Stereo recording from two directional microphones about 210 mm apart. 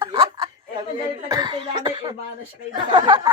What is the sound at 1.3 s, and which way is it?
Cough, 20° right (ahead or behind).